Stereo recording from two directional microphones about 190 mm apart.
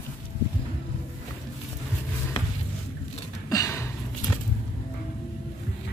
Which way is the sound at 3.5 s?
15° left (ahead or behind).